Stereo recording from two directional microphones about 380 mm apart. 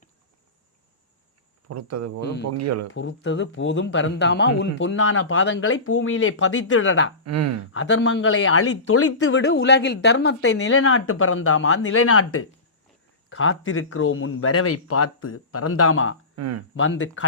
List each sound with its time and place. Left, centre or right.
1.6 s speech: right
2.2 s speech: left
2.5 s speech: right
2.9 s speech: left
7.3 s speech: right
7.7 s speech: left
16.3 s speech: right
16.7 s speech: left